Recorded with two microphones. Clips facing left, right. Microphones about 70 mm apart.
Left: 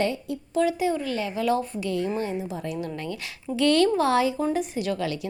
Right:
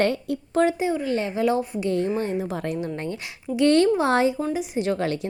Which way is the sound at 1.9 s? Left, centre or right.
Right.